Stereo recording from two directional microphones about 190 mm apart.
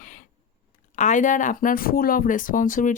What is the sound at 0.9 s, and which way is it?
Speech, 40° left (ahead or behind).